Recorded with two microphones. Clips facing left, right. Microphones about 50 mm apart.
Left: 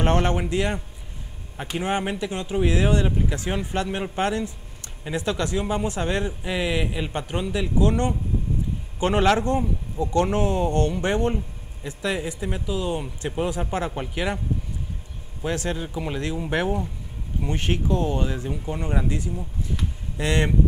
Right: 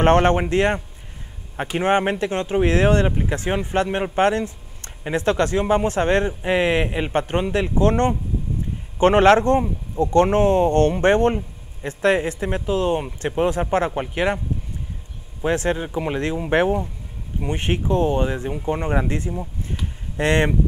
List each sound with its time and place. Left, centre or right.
0.0 s speech: right
3.1 s speech: right
15.4 s speech: right